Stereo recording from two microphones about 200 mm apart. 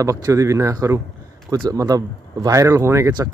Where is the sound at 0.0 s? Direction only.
15° right (ahead or behind).